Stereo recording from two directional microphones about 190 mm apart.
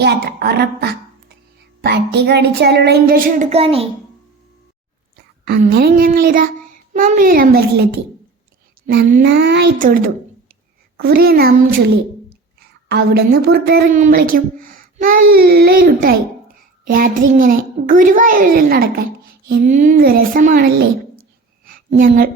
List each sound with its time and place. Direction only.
0.0 s speech: 60° right (ahead or behind); by 3.8 s 30° right (ahead or behind)
5.5 s a child's voice: 55° right (ahead or behind)
8.9 s speech: 50° right (ahead or behind)
9.3 s speech: 60° right (ahead or behind)
9.7 s a child's voice: 45° right (ahead or behind)
12.9 s a child's voice: 55° right (ahead or behind)
21.7 s a sound: 45° right (ahead or behind)